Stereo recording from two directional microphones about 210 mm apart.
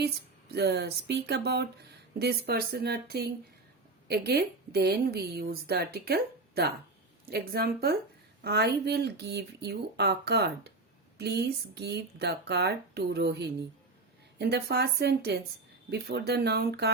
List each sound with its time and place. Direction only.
0.5 s a woman's voice: 50° right (ahead or behind)